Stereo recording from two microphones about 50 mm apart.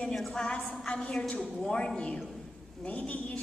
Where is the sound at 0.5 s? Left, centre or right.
Centre.